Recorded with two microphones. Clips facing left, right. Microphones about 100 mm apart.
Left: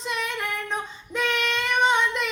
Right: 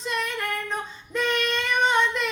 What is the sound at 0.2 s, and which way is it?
Female singing, 5° left (ahead or behind).